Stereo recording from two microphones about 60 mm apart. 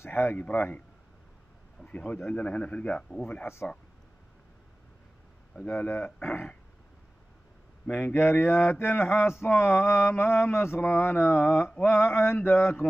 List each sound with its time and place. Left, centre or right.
0.0 s speech: left
0.4 s a man's voice: left
1.9 s a man's voice: left
5.8 s a man's voice: left
8.1 s mantra: left